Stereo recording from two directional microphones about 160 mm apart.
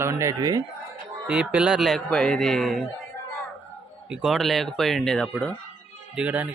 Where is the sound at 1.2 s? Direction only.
5° right (ahead or behind).